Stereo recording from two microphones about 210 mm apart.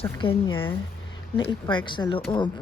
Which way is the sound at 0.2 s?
25° left (ahead or behind).